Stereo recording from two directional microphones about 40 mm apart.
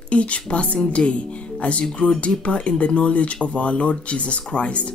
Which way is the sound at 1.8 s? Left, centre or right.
Centre.